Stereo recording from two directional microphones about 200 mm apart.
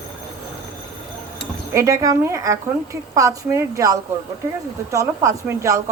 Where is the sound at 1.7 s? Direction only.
15° right (ahead or behind).